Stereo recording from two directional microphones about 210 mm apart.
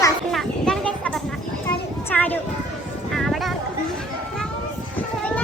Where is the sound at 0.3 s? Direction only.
Centre (ahead or behind).